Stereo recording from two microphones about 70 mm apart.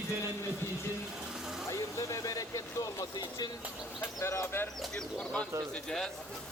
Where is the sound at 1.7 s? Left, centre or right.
Left.